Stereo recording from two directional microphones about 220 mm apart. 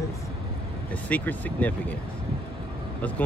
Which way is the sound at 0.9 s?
5° left (ahead or behind).